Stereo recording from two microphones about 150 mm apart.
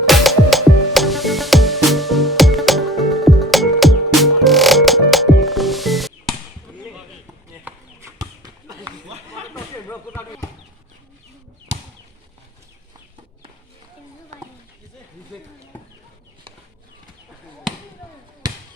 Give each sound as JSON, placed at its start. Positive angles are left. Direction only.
{"t": 0.0, "sound": "music", "side_deg": 0}
{"t": 8.2, "sound": "a sound", "side_deg": -25}
{"t": 8.8, "sound": "chatter", "side_deg": -40}